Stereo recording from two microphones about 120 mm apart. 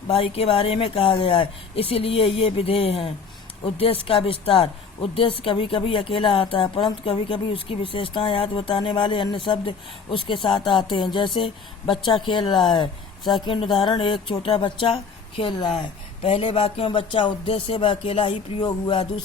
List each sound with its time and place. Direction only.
0.1 s a woman's voice: 55° left (ahead or behind)